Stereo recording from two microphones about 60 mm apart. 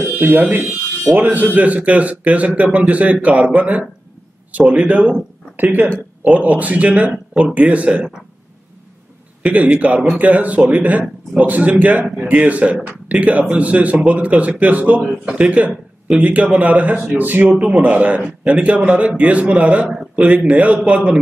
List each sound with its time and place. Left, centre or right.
0.0 s speech: right; by 8.2 s centre
9.4 s speech: right